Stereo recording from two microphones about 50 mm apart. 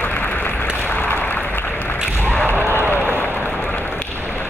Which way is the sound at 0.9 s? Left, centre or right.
Left.